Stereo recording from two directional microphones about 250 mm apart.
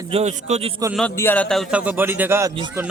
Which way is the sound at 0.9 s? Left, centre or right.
Centre.